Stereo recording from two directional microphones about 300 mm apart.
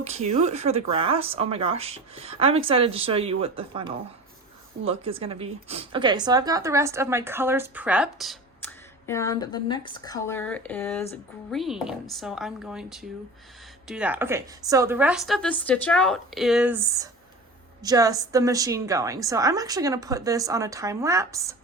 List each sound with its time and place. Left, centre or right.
0.0 s a woman's voice: right